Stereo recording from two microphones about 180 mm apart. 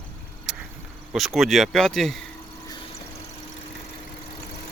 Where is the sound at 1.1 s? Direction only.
Centre (ahead or behind).